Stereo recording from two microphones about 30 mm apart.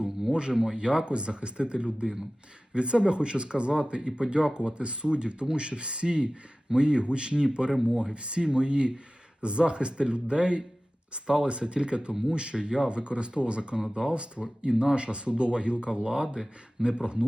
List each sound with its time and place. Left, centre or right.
0.3 s speech: right